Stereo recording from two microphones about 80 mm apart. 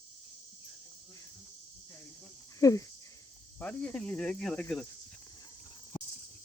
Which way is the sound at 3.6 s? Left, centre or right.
Centre.